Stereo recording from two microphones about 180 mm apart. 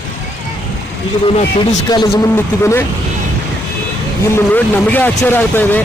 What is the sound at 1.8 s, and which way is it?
Speech, 25° left (ahead or behind).